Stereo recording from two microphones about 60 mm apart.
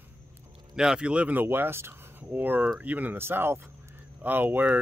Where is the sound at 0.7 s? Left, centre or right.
Centre.